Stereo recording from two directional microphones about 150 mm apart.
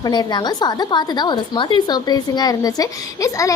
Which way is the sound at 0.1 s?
30° left (ahead or behind).